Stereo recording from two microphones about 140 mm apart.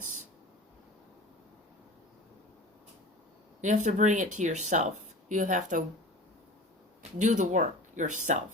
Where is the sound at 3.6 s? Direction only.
60° right (ahead or behind).